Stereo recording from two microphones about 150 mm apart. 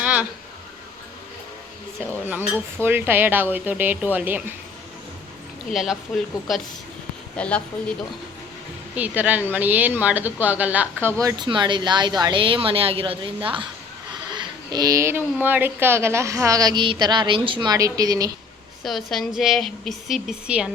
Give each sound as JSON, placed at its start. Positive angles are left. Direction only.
{"t": 0.0, "sound": "a sound", "side_deg": -10}
{"t": 2.2, "sound": "speech", "side_deg": -10}
{"t": 5.7, "sound": "speech", "side_deg": 0}
{"t": 9.0, "sound": "speech", "side_deg": -10}
{"t": 11.2, "sound": "a woman's voice", "side_deg": -25}
{"t": 18.8, "sound": "speech", "side_deg": 0}